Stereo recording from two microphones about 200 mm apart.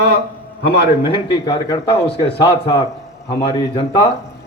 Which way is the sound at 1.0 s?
25° left (ahead or behind).